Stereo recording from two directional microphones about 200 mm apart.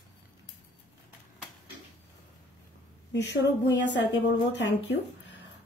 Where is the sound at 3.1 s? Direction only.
60° left (ahead or behind).